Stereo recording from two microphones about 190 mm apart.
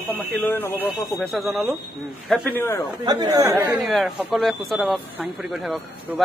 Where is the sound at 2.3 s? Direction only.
10° left (ahead or behind).